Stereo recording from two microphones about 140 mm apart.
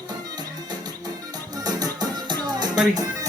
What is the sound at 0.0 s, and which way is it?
Music, 30° right (ahead or behind).